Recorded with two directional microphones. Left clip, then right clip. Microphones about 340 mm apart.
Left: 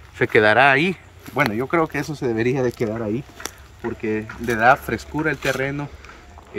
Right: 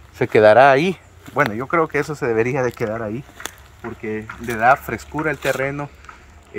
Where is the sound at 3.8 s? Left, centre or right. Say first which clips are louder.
Left 3 dB; centre.